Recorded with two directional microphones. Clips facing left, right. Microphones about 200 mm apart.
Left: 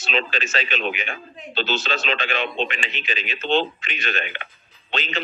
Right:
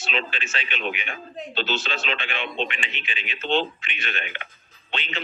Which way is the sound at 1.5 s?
40° left (ahead or behind).